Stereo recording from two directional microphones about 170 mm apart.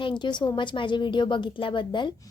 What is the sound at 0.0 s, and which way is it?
A woman's voice, 25° left (ahead or behind).